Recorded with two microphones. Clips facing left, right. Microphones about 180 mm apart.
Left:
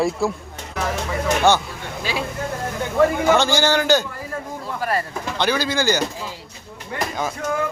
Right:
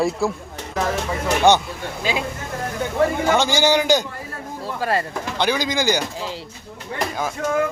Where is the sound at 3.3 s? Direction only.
15° right (ahead or behind).